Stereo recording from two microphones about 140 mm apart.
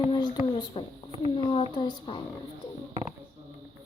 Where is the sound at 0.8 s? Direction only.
35° left (ahead or behind).